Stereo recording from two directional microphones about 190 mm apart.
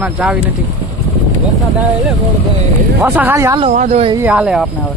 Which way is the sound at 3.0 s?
10° right (ahead or behind).